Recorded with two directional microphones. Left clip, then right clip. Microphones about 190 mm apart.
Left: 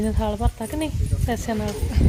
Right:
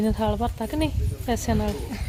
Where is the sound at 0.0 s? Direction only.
10° right (ahead or behind).